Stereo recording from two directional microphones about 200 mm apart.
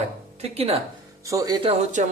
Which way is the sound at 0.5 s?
30° right (ahead or behind).